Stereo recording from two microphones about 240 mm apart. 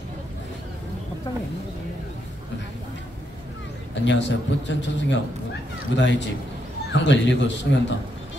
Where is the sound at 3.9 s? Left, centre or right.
Left.